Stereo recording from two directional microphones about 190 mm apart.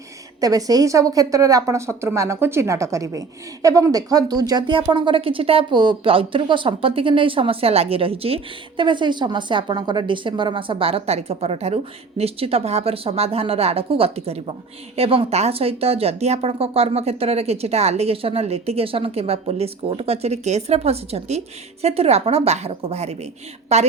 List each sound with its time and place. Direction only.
0.3 s a woman's voice: 20° right (ahead or behind); by 23.9 s 35° right (ahead or behind)